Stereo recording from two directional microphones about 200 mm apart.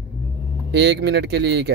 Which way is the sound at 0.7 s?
55° right (ahead or behind).